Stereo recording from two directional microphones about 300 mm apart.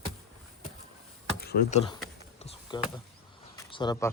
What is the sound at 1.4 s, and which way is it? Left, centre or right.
Speech, left.